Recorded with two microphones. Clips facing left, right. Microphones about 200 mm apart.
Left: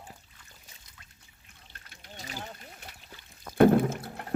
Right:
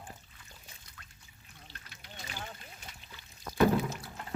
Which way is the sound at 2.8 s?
60° left (ahead or behind).